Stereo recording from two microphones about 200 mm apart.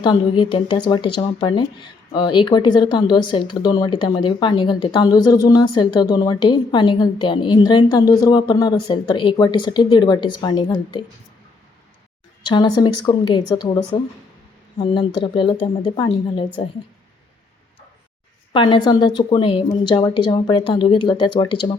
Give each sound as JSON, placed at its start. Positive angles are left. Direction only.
{"t": 0.0, "sound": "speech", "side_deg": 20}
{"t": 12.5, "sound": "speech", "side_deg": 20}
{"t": 15.2, "sound": "speech", "side_deg": 25}
{"t": 18.5, "sound": "speech", "side_deg": 20}